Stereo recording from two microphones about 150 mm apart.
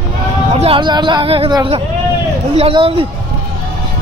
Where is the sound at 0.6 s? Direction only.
35° right (ahead or behind).